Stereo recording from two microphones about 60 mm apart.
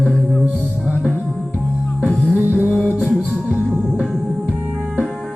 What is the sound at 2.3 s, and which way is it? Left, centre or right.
Music, right.